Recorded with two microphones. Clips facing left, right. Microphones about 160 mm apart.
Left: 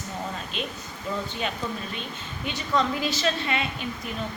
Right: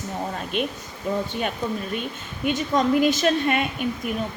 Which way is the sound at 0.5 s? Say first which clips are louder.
Right 7 dB; 60° right (ahead or behind).